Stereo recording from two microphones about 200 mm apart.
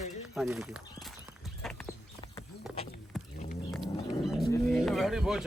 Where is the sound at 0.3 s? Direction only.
Centre (ahead or behind).